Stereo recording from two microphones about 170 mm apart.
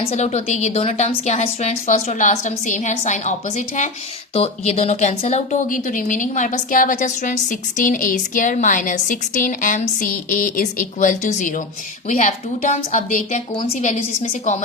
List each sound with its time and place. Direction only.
0.0 s a woman's voice: 35° left (ahead or behind)
13.5 s a woman's voice: 30° left (ahead or behind)
13.7 s speech: 45° left (ahead or behind)